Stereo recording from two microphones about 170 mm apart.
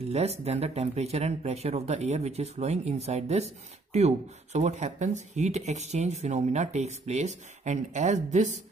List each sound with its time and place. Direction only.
0.1 s speech: 40° right (ahead or behind)